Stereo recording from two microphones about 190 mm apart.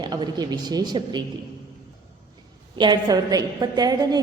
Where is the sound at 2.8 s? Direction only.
20° right (ahead or behind).